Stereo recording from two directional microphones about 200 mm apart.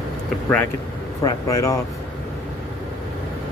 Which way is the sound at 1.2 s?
15° left (ahead or behind).